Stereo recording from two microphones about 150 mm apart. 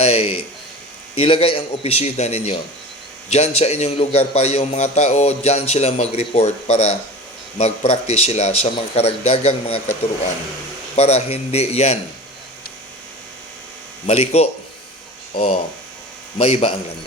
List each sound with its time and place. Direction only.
0.0 s a sound: 40° left (ahead or behind)
1.1 s a man's voice: 40° left (ahead or behind)
10.9 s a man's voice: 45° left (ahead or behind)
14.1 s a man's voice: 45° left (ahead or behind)